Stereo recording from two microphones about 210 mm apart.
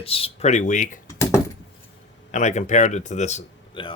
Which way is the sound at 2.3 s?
35° left (ahead or behind).